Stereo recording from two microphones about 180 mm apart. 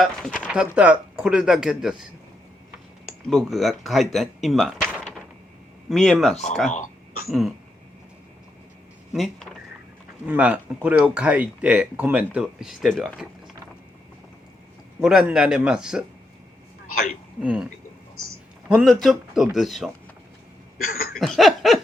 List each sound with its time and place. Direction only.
0.0 s speech: 5° left (ahead or behind)
3.2 s speech: centre (ahead or behind)
5.9 s speech: centre (ahead or behind)
6.7 s speech: 45° left (ahead or behind)
7.3 s speech: centre (ahead or behind)
9.1 s speech: centre (ahead or behind)
15.0 s speech: 5° right (ahead or behind)
17.4 s speech: 5° right (ahead or behind)
18.7 s speech: 5° right (ahead or behind)
20.9 s a sound: 50° left (ahead or behind)
21.2 s speech: centre (ahead or behind)